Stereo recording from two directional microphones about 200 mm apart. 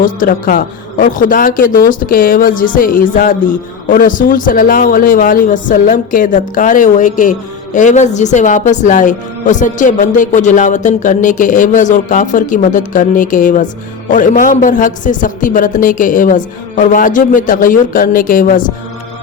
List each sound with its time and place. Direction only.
0.0 s speech: 45° left (ahead or behind)